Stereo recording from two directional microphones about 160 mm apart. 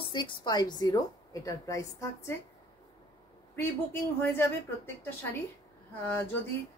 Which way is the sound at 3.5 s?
15° left (ahead or behind).